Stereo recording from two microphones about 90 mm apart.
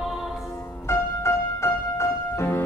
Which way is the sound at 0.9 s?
30° left (ahead or behind).